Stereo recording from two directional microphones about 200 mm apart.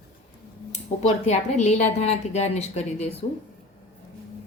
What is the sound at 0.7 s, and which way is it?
A woman's voice, 35° left (ahead or behind).